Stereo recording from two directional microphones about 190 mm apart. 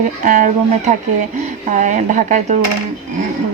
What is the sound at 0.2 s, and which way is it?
Speech, 40° right (ahead or behind).